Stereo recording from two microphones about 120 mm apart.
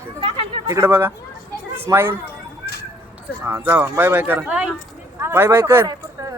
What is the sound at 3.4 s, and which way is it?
Speech, 15° right (ahead or behind).